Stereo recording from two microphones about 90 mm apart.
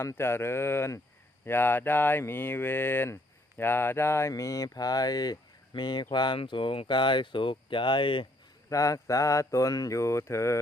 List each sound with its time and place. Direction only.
0.2 s speech: 25° left (ahead or behind); by 8.3 s 65° left (ahead or behind)
8.7 s speech: 40° left (ahead or behind)